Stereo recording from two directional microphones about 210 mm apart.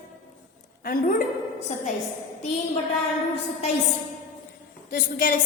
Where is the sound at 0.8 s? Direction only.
40° left (ahead or behind).